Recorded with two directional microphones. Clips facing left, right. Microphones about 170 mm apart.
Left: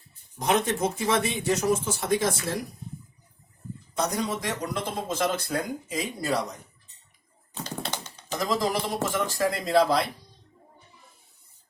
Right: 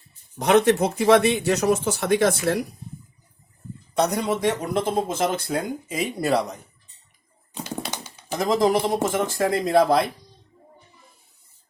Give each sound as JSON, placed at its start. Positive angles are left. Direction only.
{"t": 0.3, "sound": "speech", "side_deg": -70}
{"t": 3.9, "sound": "speech", "side_deg": -65}
{"t": 7.5, "sound": "typing", "side_deg": -10}
{"t": 8.4, "sound": "speech", "side_deg": -55}